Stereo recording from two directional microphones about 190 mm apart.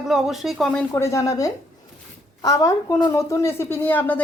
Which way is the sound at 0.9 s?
15° left (ahead or behind).